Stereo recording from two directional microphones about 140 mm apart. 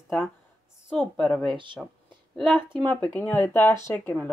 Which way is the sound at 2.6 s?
35° right (ahead or behind).